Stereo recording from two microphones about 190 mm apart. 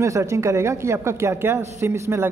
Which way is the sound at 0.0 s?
15° right (ahead or behind).